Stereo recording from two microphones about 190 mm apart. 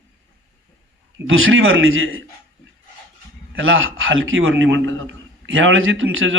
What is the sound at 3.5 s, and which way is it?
A man's voice, 90° right.